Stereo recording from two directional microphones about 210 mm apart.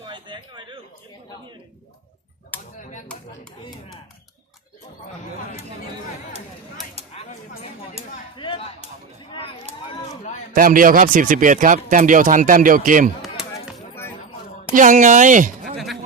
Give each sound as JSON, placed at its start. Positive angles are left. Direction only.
{"t": 0.1, "sound": "a sound", "side_deg": -20}
{"t": 2.5, "sound": "a sound", "side_deg": 10}
{"t": 7.2, "sound": "speech", "side_deg": 30}
{"t": 8.0, "sound": "speech", "side_deg": -30}
{"t": 8.4, "sound": "speech", "side_deg": 25}
{"t": 10.5, "sound": "a man's voice", "side_deg": -40}
{"t": 13.4, "sound": "chop", "side_deg": -5}
{"t": 14.7, "sound": "speech", "side_deg": -40}